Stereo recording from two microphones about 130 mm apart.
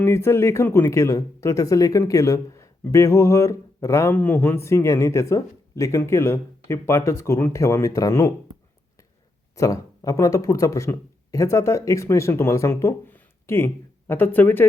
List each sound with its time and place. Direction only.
0.0 s speech: 20° left (ahead or behind)
9.6 s speech: 25° left (ahead or behind)